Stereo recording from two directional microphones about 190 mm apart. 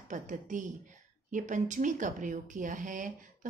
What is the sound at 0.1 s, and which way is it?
A woman's voice, 40° right (ahead or behind).